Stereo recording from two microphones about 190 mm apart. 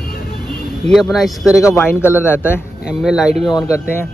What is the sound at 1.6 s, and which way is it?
Speech, 15° left (ahead or behind).